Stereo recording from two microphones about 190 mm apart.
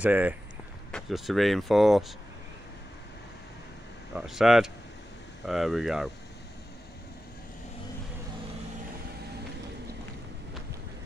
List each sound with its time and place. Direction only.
0.0 s speech: 10° right (ahead or behind)
4.1 s speech: 5° right (ahead or behind)